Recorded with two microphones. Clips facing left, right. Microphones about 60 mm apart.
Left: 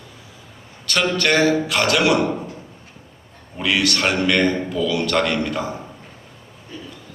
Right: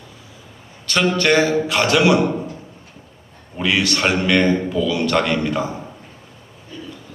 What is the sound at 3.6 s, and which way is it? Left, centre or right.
A man's voice, right.